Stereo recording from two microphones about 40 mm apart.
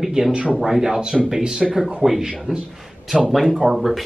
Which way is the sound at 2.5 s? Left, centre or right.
Centre.